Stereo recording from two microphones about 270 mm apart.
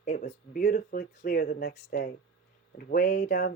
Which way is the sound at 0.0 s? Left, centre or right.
Left.